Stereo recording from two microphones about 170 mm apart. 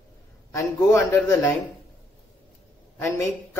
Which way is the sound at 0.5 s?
15° left (ahead or behind).